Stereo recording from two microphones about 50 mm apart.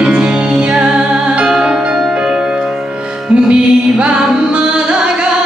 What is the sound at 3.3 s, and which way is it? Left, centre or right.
Music, right.